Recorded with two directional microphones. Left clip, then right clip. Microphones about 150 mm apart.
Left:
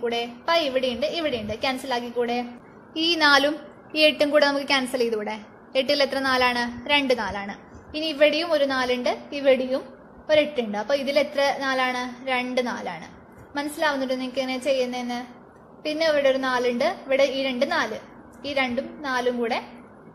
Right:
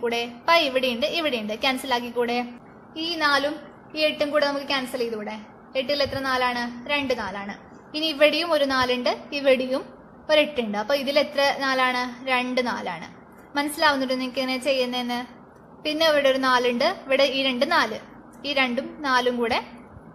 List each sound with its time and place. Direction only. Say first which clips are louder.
0.0 s a woman's voice: right 1 dB; centre (ahead or behind)
2.9 s a woman's voice: left 4 dB; 30° left (ahead or behind)
7.9 s a woman's voice: even; 5° left (ahead or behind)